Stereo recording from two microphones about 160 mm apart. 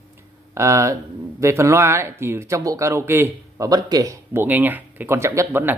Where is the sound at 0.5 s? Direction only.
20° right (ahead or behind).